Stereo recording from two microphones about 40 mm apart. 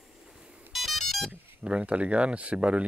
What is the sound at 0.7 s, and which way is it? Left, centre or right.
Ringtone, centre.